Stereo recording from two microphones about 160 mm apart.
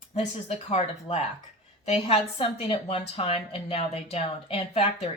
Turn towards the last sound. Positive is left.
turn(degrees=35)  # may be behind; listen again after turning